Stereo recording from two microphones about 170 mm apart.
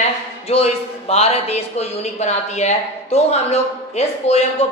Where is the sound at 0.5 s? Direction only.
35° left (ahead or behind).